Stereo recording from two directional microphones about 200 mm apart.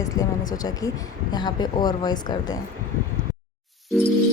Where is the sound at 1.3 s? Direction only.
20° left (ahead or behind).